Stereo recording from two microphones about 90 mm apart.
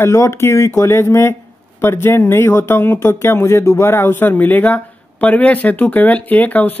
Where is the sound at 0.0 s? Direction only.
30° left (ahead or behind).